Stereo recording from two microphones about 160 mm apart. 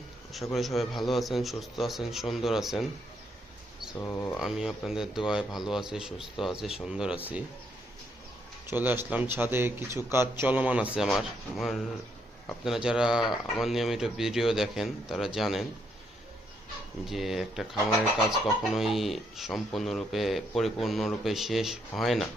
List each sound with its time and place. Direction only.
0.5 s speech: centre (ahead or behind)
4.0 s speech: 15° left (ahead or behind)
4.4 s speech: 5° right (ahead or behind)
8.7 s speech: 10° right (ahead or behind)
17.1 s speech: centre (ahead or behind)
18.7 s speech: centre (ahead or behind)